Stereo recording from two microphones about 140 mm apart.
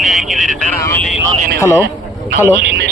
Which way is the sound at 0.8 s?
20° left (ahead or behind).